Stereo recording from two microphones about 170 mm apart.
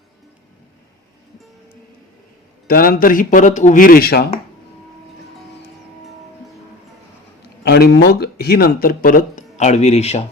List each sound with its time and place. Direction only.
2.6 s speech: 55° left (ahead or behind)
7.6 s speech: 75° left (ahead or behind); by 10.2 s 40° left (ahead or behind)